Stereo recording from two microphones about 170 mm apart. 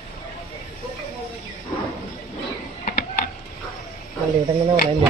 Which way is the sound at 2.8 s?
50° left (ahead or behind).